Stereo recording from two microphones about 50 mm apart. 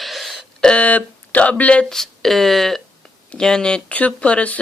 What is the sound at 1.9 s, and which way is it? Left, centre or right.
Speech, centre.